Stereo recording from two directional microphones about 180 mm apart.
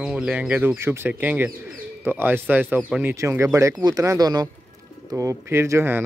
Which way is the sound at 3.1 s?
15° right (ahead or behind).